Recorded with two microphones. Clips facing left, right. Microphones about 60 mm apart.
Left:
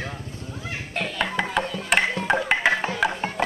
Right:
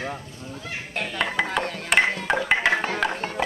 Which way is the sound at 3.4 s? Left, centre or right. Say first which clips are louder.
Left 1 dB; centre.